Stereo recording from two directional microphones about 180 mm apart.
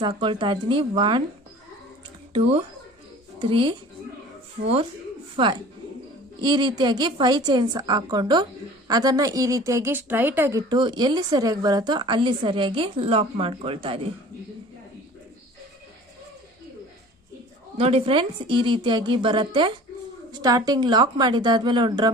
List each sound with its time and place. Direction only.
0.0 s a woman's voice: 25° right (ahead or behind)
2.3 s a woman's voice: 30° right (ahead or behind)
17.7 s a woman's voice: 30° right (ahead or behind)